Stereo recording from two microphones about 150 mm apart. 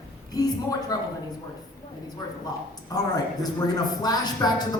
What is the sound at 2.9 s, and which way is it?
Speech, 25° left (ahead or behind).